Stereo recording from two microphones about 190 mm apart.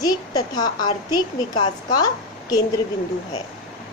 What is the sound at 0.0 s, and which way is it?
A woman's voice, 20° left (ahead or behind).